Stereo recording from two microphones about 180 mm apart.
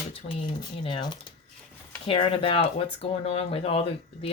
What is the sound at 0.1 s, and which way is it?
Speech, 30° left (ahead or behind).